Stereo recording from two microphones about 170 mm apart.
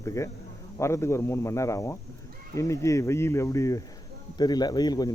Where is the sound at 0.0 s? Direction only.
15° left (ahead or behind).